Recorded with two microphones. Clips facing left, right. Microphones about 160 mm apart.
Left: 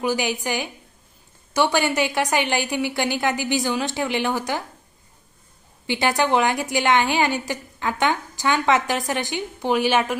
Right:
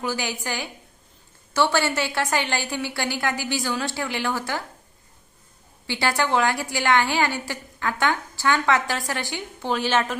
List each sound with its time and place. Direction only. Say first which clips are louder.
0.0 s a woman's voice: left 5 dB; 15° left (ahead or behind)
5.9 s a woman's voice: left 3 dB; 20° left (ahead or behind)